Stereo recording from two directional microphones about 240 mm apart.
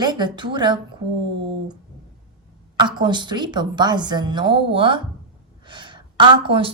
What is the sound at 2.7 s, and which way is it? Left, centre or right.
A woman's voice, centre.